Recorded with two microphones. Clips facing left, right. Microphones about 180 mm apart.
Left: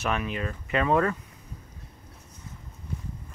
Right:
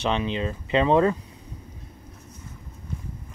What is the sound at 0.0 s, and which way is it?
Speech, 25° right (ahead or behind).